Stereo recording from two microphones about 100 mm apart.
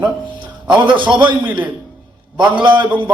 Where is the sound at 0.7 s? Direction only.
55° right (ahead or behind).